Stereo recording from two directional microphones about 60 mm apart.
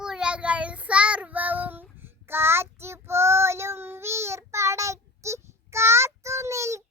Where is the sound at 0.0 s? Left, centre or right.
Centre; by 1.8 s right.